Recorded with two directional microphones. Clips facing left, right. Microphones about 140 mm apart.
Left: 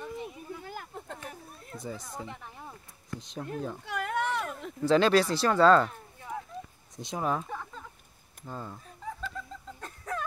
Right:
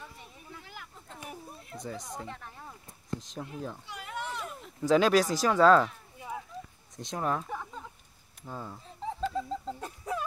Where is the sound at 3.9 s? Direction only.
60° left (ahead or behind).